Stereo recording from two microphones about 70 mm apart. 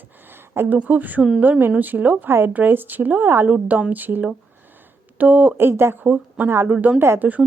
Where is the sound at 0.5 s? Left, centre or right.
Right.